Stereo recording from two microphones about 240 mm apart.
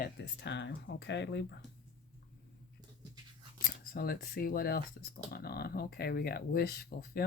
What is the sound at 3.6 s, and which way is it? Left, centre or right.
Speech, left.